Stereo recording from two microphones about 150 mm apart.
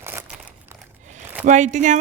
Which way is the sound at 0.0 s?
15° right (ahead or behind).